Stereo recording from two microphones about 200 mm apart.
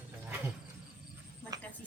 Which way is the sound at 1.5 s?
20° right (ahead or behind).